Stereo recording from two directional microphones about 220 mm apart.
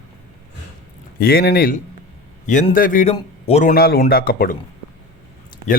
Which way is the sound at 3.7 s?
45° left (ahead or behind).